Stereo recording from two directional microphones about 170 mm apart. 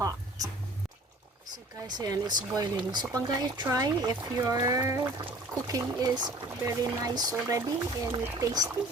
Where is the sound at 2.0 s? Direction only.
25° right (ahead or behind).